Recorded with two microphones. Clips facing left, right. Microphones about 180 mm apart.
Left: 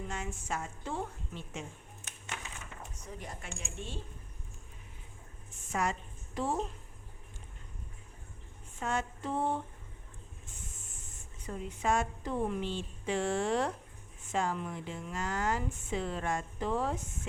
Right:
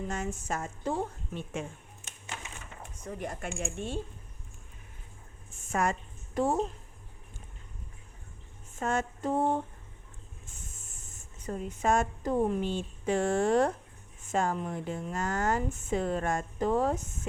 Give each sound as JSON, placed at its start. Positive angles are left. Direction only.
{"t": 0.1, "sound": "speech", "side_deg": -45}
{"t": 3.0, "sound": "speech", "side_deg": -55}
{"t": 5.7, "sound": "a woman's voice", "side_deg": -50}
{"t": 8.8, "sound": "speech", "side_deg": -45}
{"t": 11.4, "sound": "speech", "side_deg": -45}